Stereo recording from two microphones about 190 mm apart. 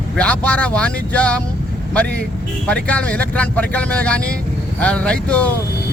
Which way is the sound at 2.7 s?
5° left (ahead or behind).